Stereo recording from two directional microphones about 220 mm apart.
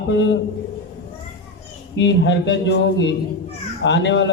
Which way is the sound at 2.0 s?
55° left (ahead or behind).